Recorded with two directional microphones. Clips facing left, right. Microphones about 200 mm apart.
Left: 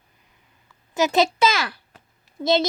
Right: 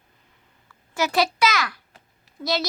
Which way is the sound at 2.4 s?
25° left (ahead or behind).